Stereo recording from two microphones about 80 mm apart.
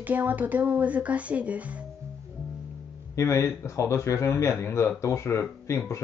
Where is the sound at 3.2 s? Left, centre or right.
Left.